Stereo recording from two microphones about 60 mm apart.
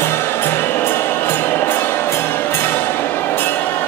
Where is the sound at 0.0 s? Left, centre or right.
Left.